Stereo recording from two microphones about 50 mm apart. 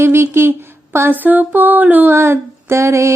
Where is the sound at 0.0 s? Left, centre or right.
Right.